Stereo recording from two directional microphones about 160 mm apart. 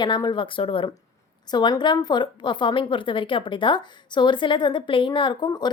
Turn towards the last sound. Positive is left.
turn(degrees=25)  # may be behind; listen again after turning